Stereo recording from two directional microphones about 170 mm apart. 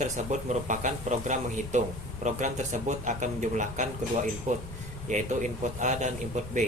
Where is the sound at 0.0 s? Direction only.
45° right (ahead or behind).